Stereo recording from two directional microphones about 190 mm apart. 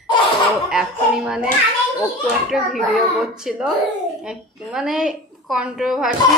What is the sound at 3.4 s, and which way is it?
A woman's voice, 5° right (ahead or behind).